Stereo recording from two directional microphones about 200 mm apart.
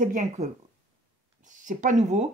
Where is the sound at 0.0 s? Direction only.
35° right (ahead or behind).